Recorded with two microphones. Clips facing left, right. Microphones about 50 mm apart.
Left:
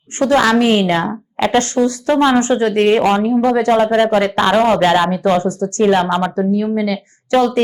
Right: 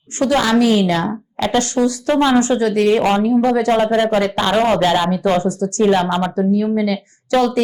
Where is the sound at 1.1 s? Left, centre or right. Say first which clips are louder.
Left 3 dB; left.